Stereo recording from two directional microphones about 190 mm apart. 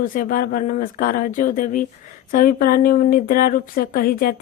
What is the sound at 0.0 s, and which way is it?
Speech, 45° left (ahead or behind).